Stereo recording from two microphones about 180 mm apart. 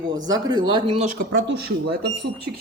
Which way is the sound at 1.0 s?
50° right (ahead or behind).